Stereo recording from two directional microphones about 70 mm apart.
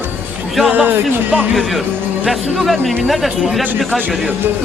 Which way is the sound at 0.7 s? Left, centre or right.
Right.